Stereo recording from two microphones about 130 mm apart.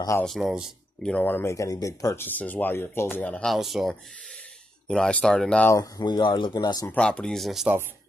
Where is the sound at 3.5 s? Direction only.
Centre (ahead or behind).